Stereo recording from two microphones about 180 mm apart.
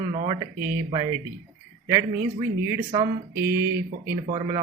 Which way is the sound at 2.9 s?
20° right (ahead or behind).